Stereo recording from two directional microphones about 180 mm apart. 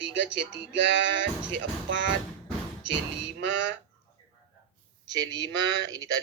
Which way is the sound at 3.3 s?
90° right.